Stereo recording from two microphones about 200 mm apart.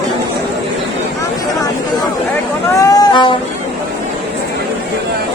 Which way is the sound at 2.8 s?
20° left (ahead or behind).